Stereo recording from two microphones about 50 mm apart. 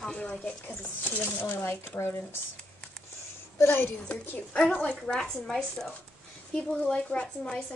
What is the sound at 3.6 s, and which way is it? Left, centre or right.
Speech, left.